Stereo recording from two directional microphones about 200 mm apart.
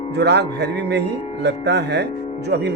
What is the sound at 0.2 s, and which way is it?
Speech, 55° right (ahead or behind).